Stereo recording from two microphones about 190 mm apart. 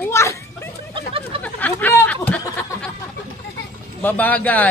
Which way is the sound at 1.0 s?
30° right (ahead or behind).